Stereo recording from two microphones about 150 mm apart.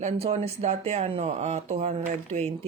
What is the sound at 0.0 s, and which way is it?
Speech, 45° right (ahead or behind).